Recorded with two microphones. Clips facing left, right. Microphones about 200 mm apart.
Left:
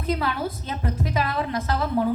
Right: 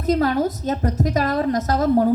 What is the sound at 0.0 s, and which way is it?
A woman's voice, 40° right (ahead or behind).